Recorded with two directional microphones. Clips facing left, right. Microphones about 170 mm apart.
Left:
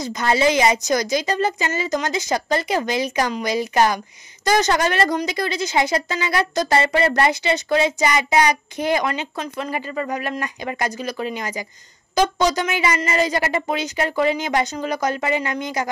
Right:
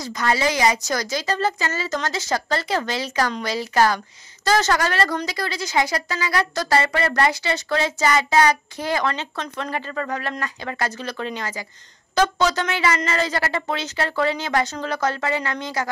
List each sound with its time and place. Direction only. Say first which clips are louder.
0.0 s speech: left 3 dB; 20° left (ahead or behind)